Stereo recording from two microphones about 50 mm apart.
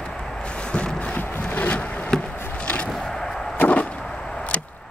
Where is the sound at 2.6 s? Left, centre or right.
Left.